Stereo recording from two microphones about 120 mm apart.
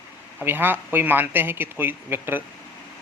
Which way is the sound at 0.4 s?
15° right (ahead or behind).